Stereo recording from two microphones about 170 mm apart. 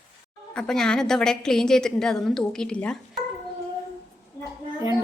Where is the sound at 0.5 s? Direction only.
5° left (ahead or behind).